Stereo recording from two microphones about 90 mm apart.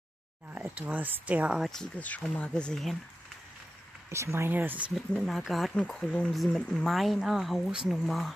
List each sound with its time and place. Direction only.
0.5 s speech: 15° right (ahead or behind)
1.5 s speech: centre (ahead or behind)
2.0 s speech: 15° left (ahead or behind)
4.1 s speech: 30° right (ahead or behind)
4.5 s speech: 20° right (ahead or behind)
5.2 s speech: centre (ahead or behind)